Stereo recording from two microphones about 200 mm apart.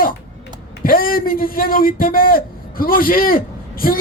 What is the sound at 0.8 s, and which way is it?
A man's voice, 45° left (ahead or behind).